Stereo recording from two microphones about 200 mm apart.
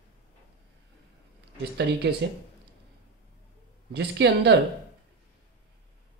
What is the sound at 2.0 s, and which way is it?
Speech, 55° right (ahead or behind).